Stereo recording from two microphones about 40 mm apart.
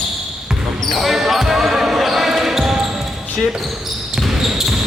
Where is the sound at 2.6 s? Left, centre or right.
Centre.